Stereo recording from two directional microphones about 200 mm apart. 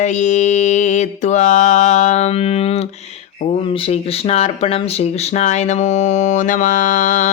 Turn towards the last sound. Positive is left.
turn(degrees=40)  # may be behind; listen again after turning